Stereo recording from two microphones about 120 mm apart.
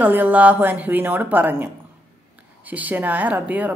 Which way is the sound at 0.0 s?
15° right (ahead or behind).